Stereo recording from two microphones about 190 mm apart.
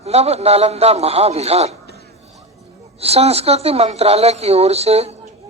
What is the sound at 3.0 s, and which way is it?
Speech, 35° right (ahead or behind).